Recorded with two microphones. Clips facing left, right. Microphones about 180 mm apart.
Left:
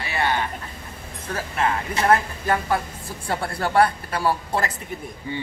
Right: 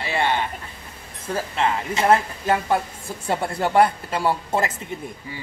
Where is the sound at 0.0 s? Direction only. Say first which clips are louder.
Right 2 dB; 25° right (ahead or behind).